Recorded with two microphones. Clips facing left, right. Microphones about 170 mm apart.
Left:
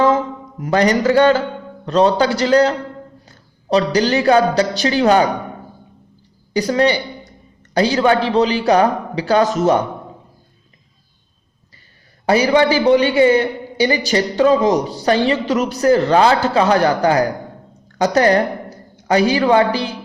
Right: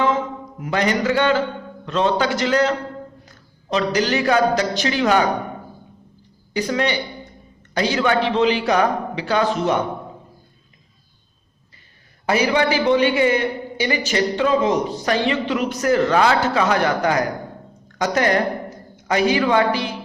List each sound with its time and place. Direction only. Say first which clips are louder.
0.6 s a woman's voice: left 5 dB; 35° left (ahead or behind)
6.5 s speech: left 6 dB; 35° left (ahead or behind)
12.2 s speech: left 5 dB; 35° left (ahead or behind)